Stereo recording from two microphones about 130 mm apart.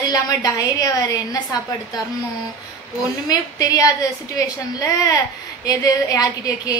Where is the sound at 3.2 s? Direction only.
30° left (ahead or behind).